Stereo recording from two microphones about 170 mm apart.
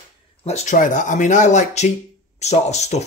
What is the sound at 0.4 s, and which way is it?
Speech, 40° left (ahead or behind).